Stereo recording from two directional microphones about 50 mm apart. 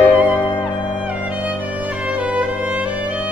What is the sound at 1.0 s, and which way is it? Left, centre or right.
Music, right.